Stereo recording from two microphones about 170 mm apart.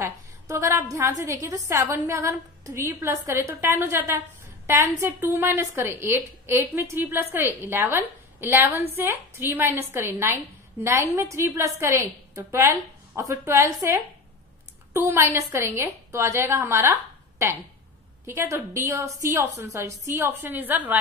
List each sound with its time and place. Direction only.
0.0 s a woman's voice: 15° right (ahead or behind)
18.2 s a woman's voice: 15° right (ahead or behind)